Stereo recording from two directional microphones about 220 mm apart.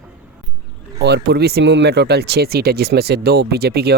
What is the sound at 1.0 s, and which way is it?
Speech, 50° right (ahead or behind).